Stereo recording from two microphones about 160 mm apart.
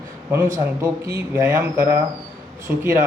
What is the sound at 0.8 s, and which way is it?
Speech, 20° right (ahead or behind).